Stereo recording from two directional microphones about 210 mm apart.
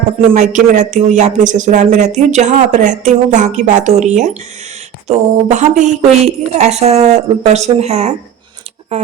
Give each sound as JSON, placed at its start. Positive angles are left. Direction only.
{"t": 0.3, "sound": "speech", "side_deg": -35}